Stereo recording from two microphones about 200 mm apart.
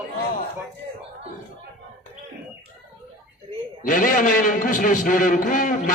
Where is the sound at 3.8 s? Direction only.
40° left (ahead or behind).